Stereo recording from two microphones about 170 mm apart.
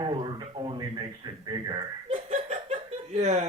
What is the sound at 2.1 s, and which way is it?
Laughter, 40° right (ahead or behind).